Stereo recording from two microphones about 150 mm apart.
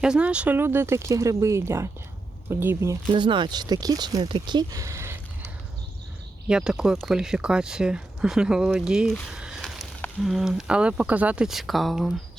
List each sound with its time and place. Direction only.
0.0 s speech: 5° right (ahead or behind)
3.1 s speech: 30° right (ahead or behind); by 5.2 s 15° right (ahead or behind)
6.5 s speech: 5° right (ahead or behind)